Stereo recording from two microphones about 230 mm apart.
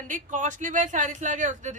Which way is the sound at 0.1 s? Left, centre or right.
Right.